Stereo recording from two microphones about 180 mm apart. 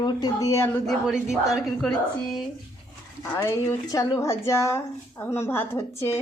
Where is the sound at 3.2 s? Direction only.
15° left (ahead or behind).